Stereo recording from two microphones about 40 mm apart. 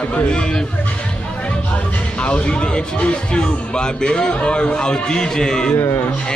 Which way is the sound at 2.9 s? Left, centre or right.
Left.